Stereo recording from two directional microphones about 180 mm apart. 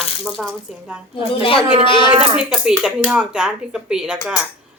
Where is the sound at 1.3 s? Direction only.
30° left (ahead or behind).